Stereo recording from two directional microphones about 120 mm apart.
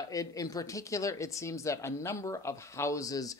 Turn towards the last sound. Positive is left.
turn(degrees=30)  # may be behind; listen again after turning